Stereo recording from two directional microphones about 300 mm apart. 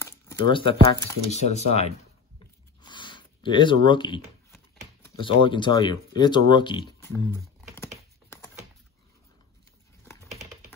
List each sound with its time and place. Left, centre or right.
0.0 s speech: centre
2.8 s a sound: centre
5.0 s speech: centre